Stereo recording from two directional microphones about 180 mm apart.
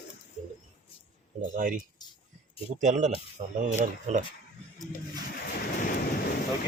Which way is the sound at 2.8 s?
40° right (ahead or behind).